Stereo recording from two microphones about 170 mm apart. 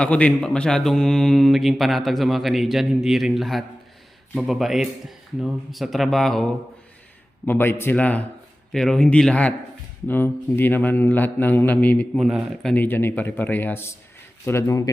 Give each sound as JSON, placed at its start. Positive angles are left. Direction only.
{"t": 0.0, "sound": "speech", "side_deg": 5}
{"t": 7.4, "sound": "a man's voice", "side_deg": 10}
{"t": 12.7, "sound": "a man's voice", "side_deg": 10}